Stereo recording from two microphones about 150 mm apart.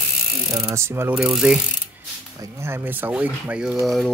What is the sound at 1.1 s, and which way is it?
Ratchet, 5° right (ahead or behind).